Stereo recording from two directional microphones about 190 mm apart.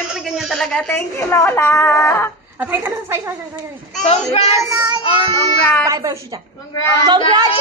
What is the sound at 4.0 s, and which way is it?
Speech, 35° left (ahead or behind).